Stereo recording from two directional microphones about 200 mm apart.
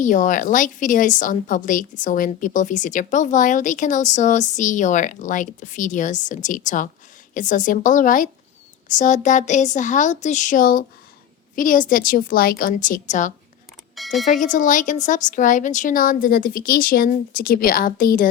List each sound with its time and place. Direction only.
0.0 s a woman's voice: 40° left (ahead or behind)
13.9 s a sound: centre (ahead or behind)
14.3 s a woman's voice: 40° left (ahead or behind)